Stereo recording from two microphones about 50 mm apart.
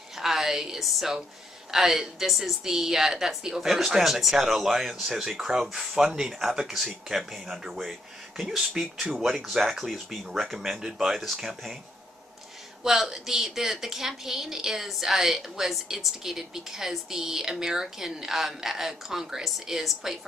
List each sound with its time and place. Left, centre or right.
0.1 s a woman's voice: centre
10.6 s a woman's voice: centre
12.8 s a woman's voice: centre